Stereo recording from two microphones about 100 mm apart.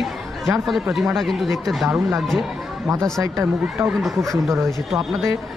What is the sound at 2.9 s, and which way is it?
Speech, 35° right (ahead or behind).